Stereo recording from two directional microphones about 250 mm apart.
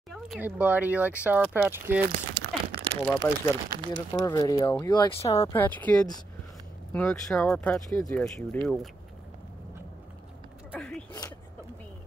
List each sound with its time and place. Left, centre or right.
0.1 s speech: centre
2.0 s crumpling: right
3.2 s speech: centre
3.7 s speech: centre
4.1 s speech: centre
10.7 s gasp: centre